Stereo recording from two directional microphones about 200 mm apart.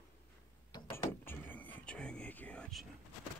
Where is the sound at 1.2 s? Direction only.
10° left (ahead or behind).